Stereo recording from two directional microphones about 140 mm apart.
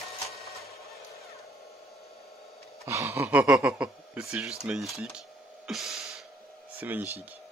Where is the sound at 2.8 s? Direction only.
20° right (ahead or behind); by 6.2 s centre (ahead or behind).